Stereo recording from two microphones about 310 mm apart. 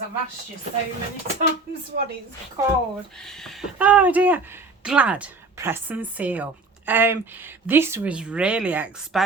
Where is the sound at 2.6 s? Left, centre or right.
Centre.